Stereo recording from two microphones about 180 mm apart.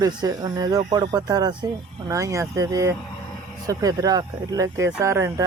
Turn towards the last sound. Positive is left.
turn(degrees=-15)  # may be behind; listen again after turning